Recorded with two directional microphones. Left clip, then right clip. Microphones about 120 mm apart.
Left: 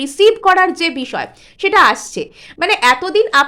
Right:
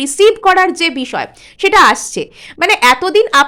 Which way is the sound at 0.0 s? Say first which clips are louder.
Right 2 dB; 20° right (ahead or behind).